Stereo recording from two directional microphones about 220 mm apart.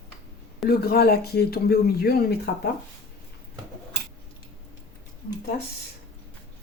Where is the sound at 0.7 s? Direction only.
45° left (ahead or behind).